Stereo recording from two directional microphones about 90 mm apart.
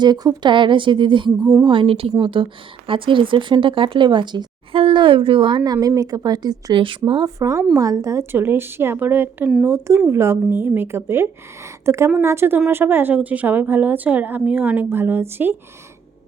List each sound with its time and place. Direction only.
0.0 s speech: 50° right (ahead or behind)
0.5 s a woman's voice: 65° right (ahead or behind)
1.6 s speech: 70° right (ahead or behind)
2.1 s a woman's voice: 65° right (ahead or behind); by 6.7 s 45° right (ahead or behind)
6.7 s speech: 65° right (ahead or behind)
7.3 s a woman's voice: 40° right (ahead or behind); by 9.5 s 20° right (ahead or behind)
9.6 s a woman's voice: 35° right (ahead or behind)